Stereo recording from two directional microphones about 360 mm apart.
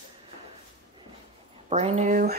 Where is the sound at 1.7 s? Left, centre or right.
Centre.